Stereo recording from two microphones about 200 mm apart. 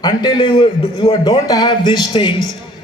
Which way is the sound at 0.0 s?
20° left (ahead or behind).